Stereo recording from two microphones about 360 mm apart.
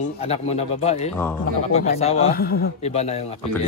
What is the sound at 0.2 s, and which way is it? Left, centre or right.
Speech, centre.